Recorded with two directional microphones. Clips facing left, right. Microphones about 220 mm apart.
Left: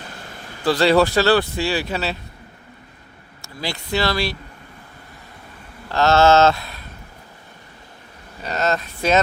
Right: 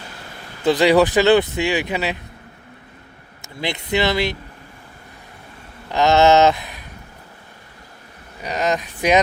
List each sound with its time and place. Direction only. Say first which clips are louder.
0.6 s speech: right 2 dB; 20° right (ahead or behind)
3.4 s speech: right 3 dB; 20° right (ahead or behind)
5.9 s speech: right 1 dB; 15° right (ahead or behind)
8.4 s speech: right 1 dB; 15° right (ahead or behind)